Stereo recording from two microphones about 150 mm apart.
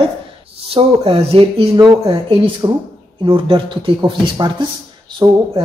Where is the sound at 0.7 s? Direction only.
40° right (ahead or behind).